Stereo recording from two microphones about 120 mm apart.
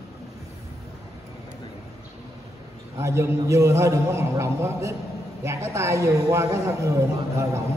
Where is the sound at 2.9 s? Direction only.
25° right (ahead or behind).